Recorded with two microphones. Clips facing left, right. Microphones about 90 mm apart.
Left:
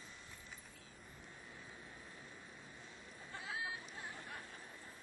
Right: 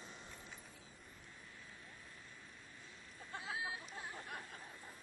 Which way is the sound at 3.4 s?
20° right (ahead or behind).